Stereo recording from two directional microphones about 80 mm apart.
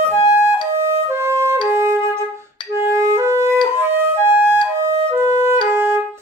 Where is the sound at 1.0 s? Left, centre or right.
Right.